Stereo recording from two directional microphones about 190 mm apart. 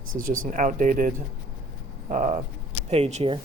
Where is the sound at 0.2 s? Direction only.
45° right (ahead or behind).